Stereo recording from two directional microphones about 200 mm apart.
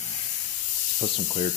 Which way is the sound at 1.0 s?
35° left (ahead or behind).